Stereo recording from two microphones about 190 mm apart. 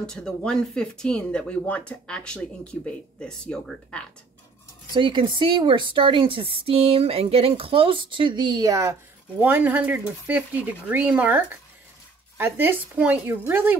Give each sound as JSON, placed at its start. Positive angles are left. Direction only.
{"t": 0.0, "sound": "speech", "side_deg": 5}
{"t": 4.9, "sound": "a woman's voice", "side_deg": -25}